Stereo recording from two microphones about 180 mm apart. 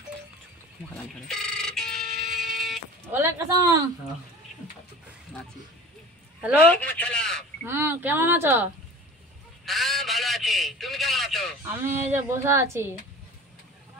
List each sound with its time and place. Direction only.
1.2 s a sound: 5° left (ahead or behind)
3.1 s speech: 10° right (ahead or behind)
6.7 s speech: 10° left (ahead or behind)
7.6 s speech: 15° right (ahead or behind)
9.7 s a sound: centre (ahead or behind)
11.8 s speech: 10° right (ahead or behind)